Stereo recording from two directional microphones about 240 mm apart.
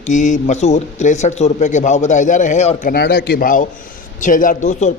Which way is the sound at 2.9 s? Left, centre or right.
Left.